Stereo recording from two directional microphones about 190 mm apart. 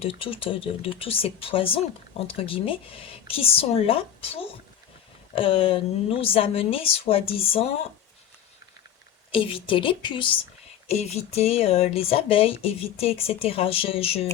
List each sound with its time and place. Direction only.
0.0 s speech: 30° left (ahead or behind)
9.3 s speech: 30° left (ahead or behind)